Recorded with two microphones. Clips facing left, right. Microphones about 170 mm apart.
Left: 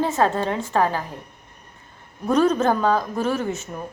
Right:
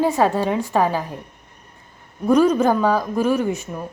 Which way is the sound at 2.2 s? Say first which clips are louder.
Right 3 dB; 10° right (ahead or behind).